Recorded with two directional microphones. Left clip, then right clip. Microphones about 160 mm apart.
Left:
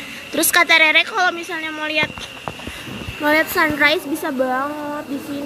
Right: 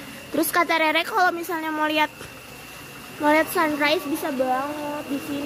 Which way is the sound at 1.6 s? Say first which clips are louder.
Left 1 dB; 35° right (ahead or behind).